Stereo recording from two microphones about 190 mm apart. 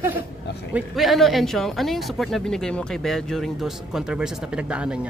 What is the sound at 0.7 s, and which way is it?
Speech, centre (ahead or behind).